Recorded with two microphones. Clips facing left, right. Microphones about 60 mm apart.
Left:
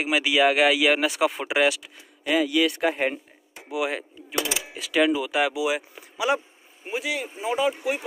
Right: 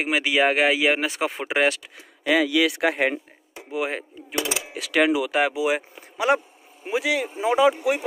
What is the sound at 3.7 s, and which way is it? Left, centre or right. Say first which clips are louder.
Speech: even; right.